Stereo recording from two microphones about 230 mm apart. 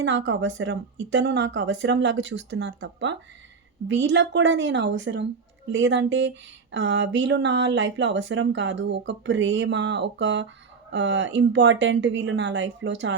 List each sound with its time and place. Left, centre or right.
0.0 s speech: right